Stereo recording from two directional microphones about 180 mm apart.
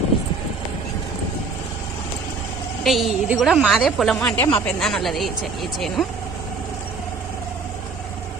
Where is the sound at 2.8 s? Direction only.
Centre (ahead or behind).